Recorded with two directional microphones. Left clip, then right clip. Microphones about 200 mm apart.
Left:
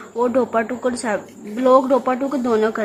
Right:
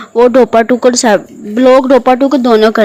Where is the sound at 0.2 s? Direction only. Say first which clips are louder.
Right 12 dB; 35° right (ahead or behind).